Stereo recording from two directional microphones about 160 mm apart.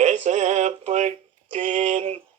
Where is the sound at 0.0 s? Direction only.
50° right (ahead or behind).